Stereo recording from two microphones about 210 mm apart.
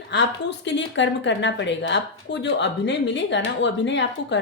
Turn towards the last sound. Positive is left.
turn(degrees=60)  # may be behind; listen again after turning